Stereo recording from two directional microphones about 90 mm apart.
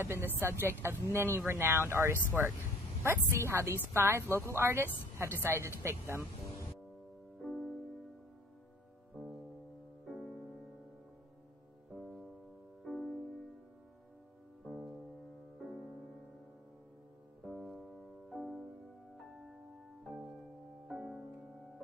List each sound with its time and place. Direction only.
0.0 s speech: 25° right (ahead or behind)
7.4 s music: centre (ahead or behind)
10.0 s music: centre (ahead or behind)
11.9 s music: centre (ahead or behind)
14.6 s music: 10° left (ahead or behind)
17.5 s piano: centre (ahead or behind)
20.0 s music: centre (ahead or behind)